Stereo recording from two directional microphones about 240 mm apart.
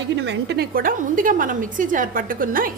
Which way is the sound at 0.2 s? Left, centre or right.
Right.